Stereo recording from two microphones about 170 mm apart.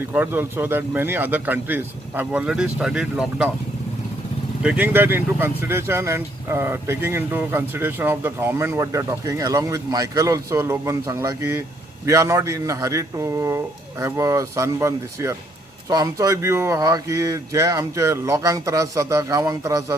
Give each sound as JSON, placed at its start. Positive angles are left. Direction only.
{"t": 0.1, "sound": "speech", "side_deg": -10}
{"t": 4.6, "sound": "speech", "side_deg": -10}